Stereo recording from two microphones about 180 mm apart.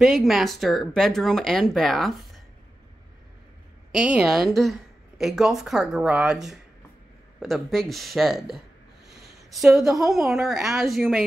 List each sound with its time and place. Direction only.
0.0 s a woman's voice: centre (ahead or behind)
3.9 s a woman's voice: 5° right (ahead or behind)
9.0 s a sound: 65° right (ahead or behind)
9.5 s a woman's voice: centre (ahead or behind)